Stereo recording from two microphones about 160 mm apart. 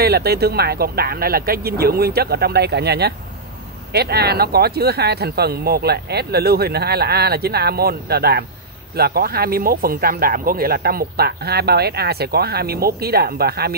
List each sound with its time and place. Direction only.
0.0 s speech: 80° right